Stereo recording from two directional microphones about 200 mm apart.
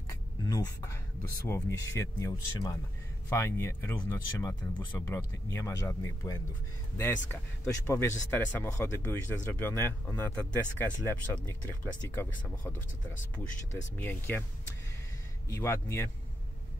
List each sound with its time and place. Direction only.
0.1 s a sound: 15° left (ahead or behind)
1.5 s a man's voice: 15° left (ahead or behind)
13.9 s a man's voice: 10° left (ahead or behind)
15.4 s a man's voice: 15° left (ahead or behind)